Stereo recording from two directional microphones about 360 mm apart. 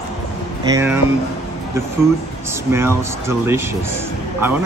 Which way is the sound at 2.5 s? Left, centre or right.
Centre.